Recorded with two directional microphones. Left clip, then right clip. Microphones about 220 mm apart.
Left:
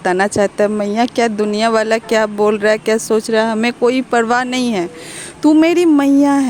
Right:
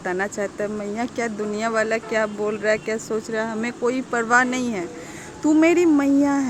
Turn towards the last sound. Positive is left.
turn(degrees=40)  # may be behind; listen again after turning